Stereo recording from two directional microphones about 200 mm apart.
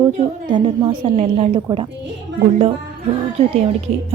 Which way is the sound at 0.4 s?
20° right (ahead or behind).